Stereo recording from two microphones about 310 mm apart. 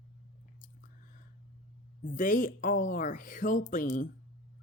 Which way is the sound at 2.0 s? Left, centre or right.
Left.